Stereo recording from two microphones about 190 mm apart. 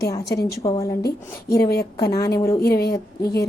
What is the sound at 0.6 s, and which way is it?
Speech, 15° left (ahead or behind).